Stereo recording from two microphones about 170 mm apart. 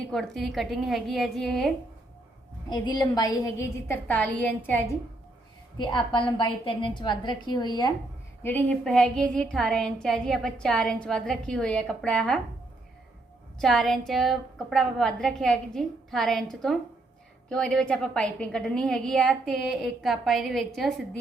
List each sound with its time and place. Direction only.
0.0 s a woman's voice: centre (ahead or behind)
2.6 s a woman's voice: 25° left (ahead or behind)
5.7 s a woman's voice: 25° left (ahead or behind)
8.4 s a woman's voice: 10° left (ahead or behind)
13.6 s a woman's voice: centre (ahead or behind)